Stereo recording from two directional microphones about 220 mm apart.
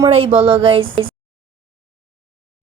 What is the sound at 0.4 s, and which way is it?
Speech, 25° right (ahead or behind).